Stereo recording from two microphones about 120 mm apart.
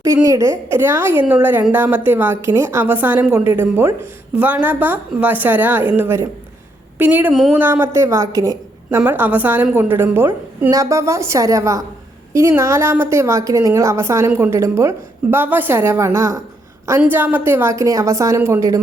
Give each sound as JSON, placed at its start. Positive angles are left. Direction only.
{"t": 0.0, "sound": "a woman's voice", "side_deg": -25}
{"t": 8.9, "sound": "a woman's voice", "side_deg": -15}
{"t": 10.7, "sound": "a woman's voice", "side_deg": -25}